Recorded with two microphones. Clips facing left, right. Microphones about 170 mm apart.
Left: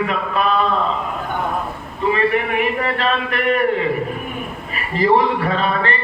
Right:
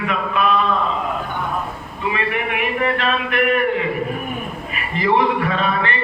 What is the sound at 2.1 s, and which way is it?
Speech, 35° left (ahead or behind).